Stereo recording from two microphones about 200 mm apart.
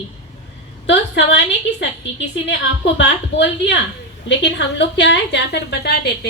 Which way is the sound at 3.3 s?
65° left (ahead or behind).